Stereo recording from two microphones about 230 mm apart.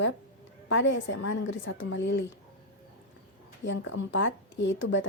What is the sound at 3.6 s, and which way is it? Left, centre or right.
A woman's voice, left.